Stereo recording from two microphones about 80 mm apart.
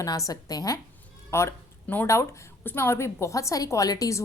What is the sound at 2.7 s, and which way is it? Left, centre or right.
A woman's voice, left.